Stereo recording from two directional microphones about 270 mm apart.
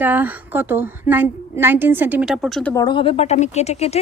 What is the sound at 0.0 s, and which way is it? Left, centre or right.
A woman's voice, centre.